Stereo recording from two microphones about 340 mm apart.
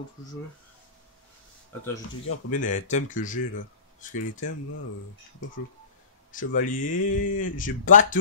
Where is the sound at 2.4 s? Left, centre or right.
Left.